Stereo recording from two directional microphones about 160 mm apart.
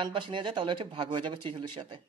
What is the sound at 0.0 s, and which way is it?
Speech, 30° right (ahead or behind).